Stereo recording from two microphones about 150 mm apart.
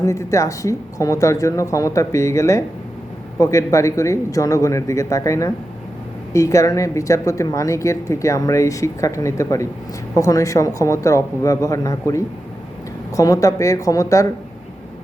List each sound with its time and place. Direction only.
0.0 s a woman's voice: 20° left (ahead or behind)